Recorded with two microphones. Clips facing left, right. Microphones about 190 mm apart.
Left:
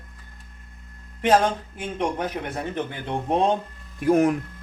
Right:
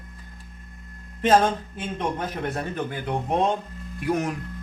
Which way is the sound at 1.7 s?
15° left (ahead or behind).